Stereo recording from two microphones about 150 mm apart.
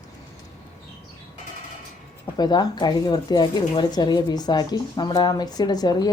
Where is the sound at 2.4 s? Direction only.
30° left (ahead or behind).